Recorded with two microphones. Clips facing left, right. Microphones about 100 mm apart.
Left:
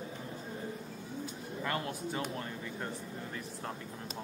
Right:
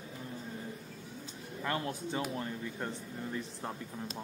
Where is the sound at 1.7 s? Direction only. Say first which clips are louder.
Right 2 dB; 20° right (ahead or behind).